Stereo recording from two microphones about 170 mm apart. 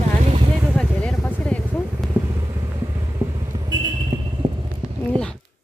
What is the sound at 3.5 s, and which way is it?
Vehicle, 25° right (ahead or behind).